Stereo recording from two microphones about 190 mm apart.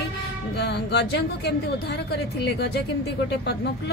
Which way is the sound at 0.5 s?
60° left (ahead or behind).